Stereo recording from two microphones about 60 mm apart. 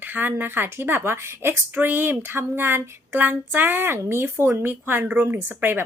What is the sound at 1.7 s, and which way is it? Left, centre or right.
Speech, right.